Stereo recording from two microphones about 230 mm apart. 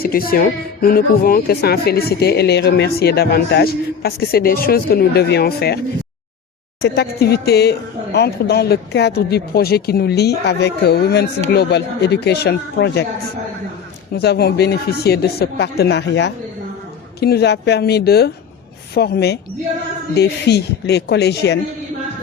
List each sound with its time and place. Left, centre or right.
0.0 s speech: left
6.8 s speech: left
14.1 s speech: left